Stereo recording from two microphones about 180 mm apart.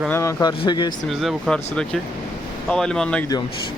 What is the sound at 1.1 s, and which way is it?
Speech, centre (ahead or behind).